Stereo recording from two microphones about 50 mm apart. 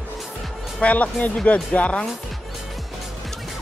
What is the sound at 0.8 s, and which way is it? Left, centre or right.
Speech, left.